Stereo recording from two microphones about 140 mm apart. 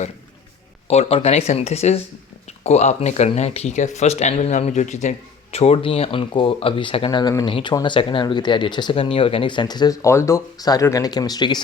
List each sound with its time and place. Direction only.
0.9 s speech: 50° left (ahead or behind); by 11.6 s 30° left (ahead or behind)